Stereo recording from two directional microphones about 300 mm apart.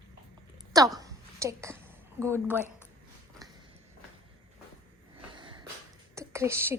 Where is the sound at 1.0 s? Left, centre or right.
Centre.